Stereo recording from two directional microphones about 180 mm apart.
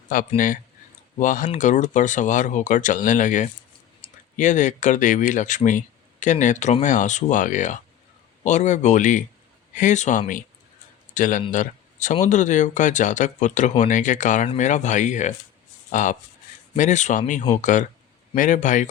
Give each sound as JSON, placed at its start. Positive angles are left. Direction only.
{"t": 0.3, "sound": "speech", "side_deg": 50}
{"t": 11.5, "sound": "a sound", "side_deg": 45}
{"t": 12.2, "sound": "speech", "side_deg": 45}